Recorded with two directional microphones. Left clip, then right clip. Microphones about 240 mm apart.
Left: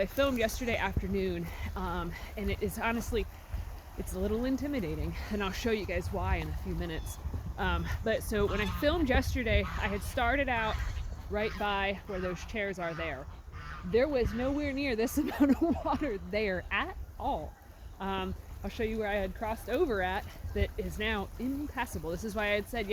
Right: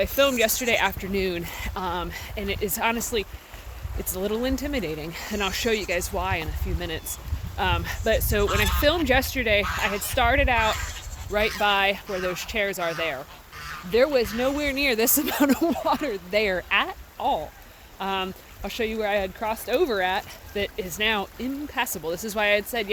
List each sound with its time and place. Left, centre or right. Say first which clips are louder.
0.0 s speech: right 8 dB; right
10.7 s insect: right 10 dB; right
11.6 s speech: right 10 dB; right; by 22.9 s centre